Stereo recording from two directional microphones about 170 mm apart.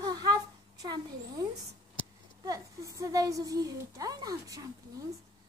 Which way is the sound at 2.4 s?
20° right (ahead or behind).